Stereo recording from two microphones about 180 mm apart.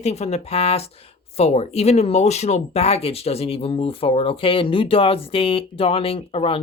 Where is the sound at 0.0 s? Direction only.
35° left (ahead or behind).